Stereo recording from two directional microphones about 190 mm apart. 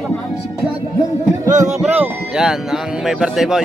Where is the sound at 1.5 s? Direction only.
40° right (ahead or behind).